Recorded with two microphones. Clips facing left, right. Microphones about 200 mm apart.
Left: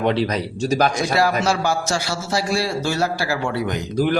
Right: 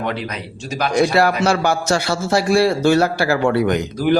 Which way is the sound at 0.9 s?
60° right (ahead or behind).